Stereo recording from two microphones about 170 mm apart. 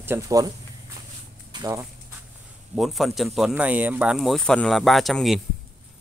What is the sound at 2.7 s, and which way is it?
Speech, centre (ahead or behind).